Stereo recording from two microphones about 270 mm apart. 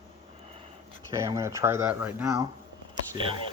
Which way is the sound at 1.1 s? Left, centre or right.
Centre.